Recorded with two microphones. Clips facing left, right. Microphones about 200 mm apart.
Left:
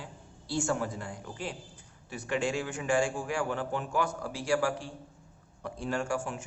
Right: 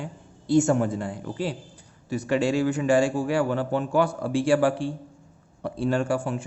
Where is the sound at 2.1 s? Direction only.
40° right (ahead or behind).